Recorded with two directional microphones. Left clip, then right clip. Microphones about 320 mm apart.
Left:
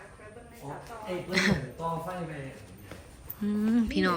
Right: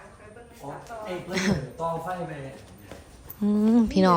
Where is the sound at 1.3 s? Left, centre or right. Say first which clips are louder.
Left 1 dB; centre.